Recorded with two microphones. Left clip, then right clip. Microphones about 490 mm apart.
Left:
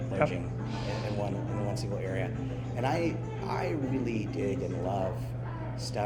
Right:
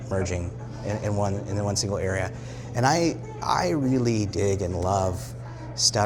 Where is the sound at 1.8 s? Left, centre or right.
Right.